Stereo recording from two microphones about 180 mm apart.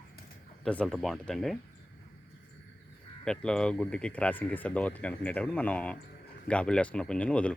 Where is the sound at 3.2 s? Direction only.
5° left (ahead or behind).